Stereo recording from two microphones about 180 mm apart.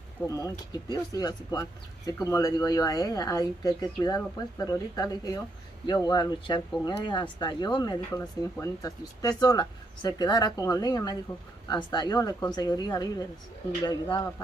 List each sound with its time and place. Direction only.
0.3 s speech: 20° left (ahead or behind)